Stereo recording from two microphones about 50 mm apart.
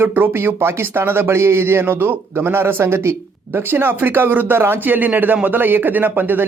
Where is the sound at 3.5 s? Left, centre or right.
Right.